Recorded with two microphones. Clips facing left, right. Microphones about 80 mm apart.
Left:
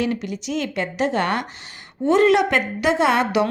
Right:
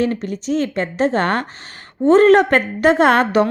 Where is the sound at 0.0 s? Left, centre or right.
Right.